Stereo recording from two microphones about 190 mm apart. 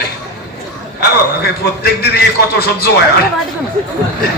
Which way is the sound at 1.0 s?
55° left (ahead or behind).